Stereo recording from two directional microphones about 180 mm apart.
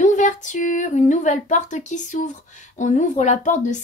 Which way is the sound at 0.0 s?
45° left (ahead or behind).